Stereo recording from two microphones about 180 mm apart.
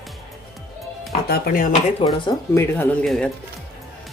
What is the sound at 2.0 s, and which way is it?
Speech, 30° left (ahead or behind).